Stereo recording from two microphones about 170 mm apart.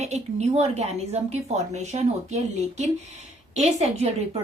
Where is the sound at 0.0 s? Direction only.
40° right (ahead or behind).